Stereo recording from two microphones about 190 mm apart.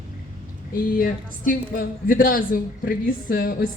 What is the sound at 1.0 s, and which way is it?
Speech, 45° left (ahead or behind).